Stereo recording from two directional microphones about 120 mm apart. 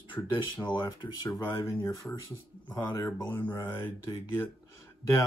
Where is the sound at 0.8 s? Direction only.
30° left (ahead or behind).